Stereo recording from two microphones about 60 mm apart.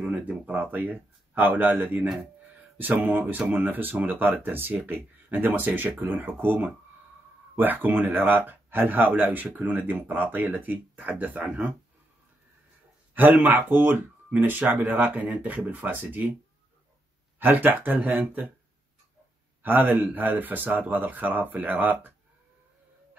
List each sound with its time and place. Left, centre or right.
0.1 s speech: right
13.1 s speech: right
17.4 s speech: right
19.6 s speech: right